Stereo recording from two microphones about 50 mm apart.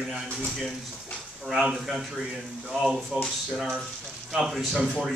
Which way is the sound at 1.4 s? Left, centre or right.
Centre.